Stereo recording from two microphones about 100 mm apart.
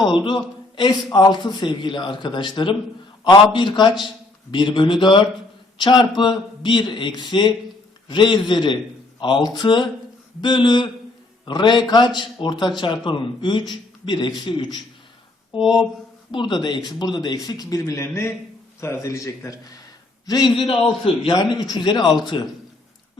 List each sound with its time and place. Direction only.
0.1 s a man's voice: 50° left (ahead or behind)
15.6 s speech: 5° right (ahead or behind)
16.3 s a man's voice: 50° left (ahead or behind)